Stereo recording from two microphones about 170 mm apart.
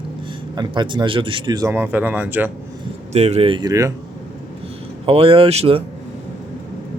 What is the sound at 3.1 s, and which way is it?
Speech, 40° right (ahead or behind).